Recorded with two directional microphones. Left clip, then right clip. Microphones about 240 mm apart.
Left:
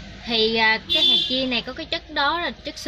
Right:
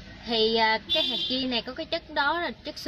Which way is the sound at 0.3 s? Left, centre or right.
Centre.